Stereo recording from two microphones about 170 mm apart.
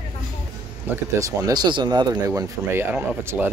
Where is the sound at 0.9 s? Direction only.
20° right (ahead or behind).